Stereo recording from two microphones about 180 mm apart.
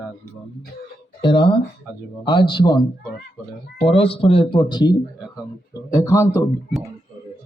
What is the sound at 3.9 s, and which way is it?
Speech, 30° left (ahead or behind).